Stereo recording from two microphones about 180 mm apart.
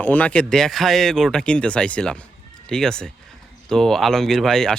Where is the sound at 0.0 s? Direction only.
10° left (ahead or behind).